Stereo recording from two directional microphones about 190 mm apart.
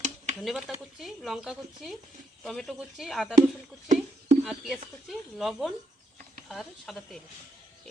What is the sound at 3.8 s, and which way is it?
Speech, 40° right (ahead or behind).